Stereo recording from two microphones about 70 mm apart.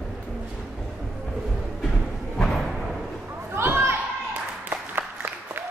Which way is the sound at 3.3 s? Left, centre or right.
Right.